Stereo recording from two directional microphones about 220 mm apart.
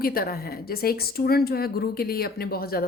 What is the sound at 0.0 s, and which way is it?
A woman's voice, 40° left (ahead or behind).